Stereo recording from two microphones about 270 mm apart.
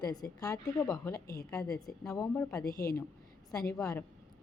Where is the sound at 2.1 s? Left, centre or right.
Centre.